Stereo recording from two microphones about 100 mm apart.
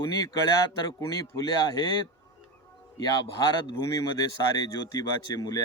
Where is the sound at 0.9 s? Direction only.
40° left (ahead or behind).